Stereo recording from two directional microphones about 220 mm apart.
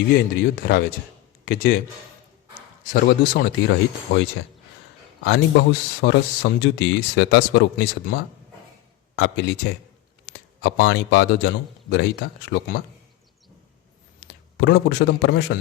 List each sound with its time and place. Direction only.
0.3 s a man's voice: 40° left (ahead or behind)
14.6 s speech: 50° left (ahead or behind)